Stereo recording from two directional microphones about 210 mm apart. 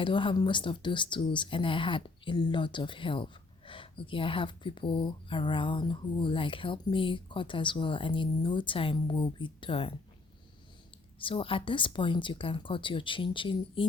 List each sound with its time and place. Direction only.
0.0 s speech: 25° left (ahead or behind)
11.2 s speech: 25° left (ahead or behind)